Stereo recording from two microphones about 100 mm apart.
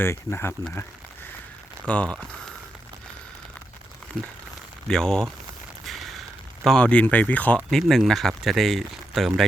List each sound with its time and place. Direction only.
0.0 s speech: 25° left (ahead or behind)
1.9 s speech: 10° left (ahead or behind)
4.1 s speech: 15° left (ahead or behind)
5.8 s a sound: centre (ahead or behind)
6.7 s speech: 10° left (ahead or behind)
7.7 s speech: centre (ahead or behind)